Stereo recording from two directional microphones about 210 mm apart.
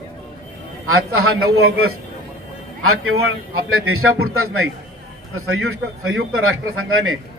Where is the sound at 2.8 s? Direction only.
85° right.